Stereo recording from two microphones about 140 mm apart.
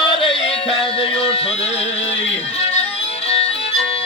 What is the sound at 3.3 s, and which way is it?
Violin, 45° left (ahead or behind).